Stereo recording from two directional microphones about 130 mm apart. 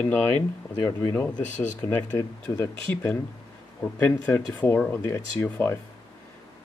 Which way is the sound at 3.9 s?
10° left (ahead or behind).